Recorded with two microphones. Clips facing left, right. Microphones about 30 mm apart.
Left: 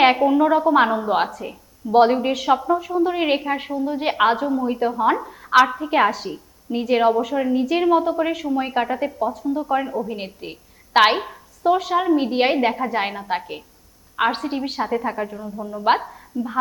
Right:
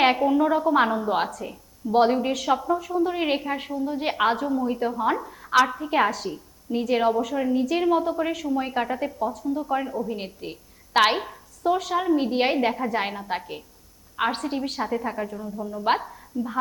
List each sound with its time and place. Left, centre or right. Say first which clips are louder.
0.0 s a woman's voice: left 4 dB; centre